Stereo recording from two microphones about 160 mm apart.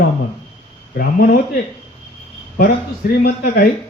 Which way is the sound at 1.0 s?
65° left (ahead or behind).